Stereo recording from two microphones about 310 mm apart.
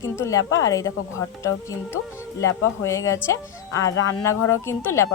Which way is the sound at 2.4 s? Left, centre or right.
Centre.